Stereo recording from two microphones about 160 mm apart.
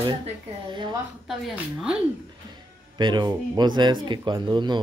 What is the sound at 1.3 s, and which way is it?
Speech, 5° right (ahead or behind).